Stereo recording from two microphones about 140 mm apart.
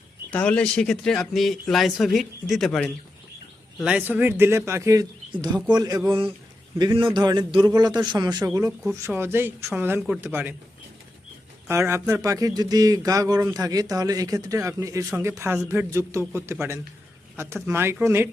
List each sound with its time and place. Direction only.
0.3 s speech: 10° left (ahead or behind)
3.8 s speech: 5° right (ahead or behind)
11.7 s speech: 20° right (ahead or behind)